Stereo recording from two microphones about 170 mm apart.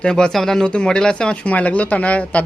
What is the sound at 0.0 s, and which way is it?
Speech, 5° left (ahead or behind).